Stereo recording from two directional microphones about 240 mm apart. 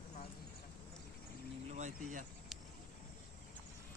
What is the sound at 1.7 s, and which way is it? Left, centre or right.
Speech, right.